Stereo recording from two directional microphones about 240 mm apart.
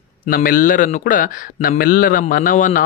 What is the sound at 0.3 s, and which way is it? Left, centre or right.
A man's voice, left.